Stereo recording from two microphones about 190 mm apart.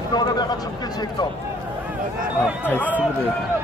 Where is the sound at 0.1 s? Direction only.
20° left (ahead or behind).